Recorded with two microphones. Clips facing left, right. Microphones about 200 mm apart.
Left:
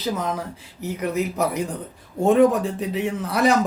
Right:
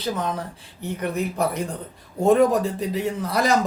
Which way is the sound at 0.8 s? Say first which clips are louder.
Left 1 dB; 30° right (ahead or behind).